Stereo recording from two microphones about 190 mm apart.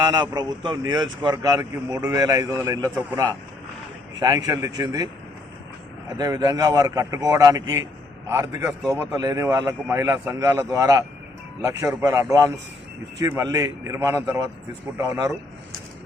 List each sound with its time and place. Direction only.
0.1 s a man's voice: 20° right (ahead or behind)
6.1 s a man's voice: 20° right (ahead or behind)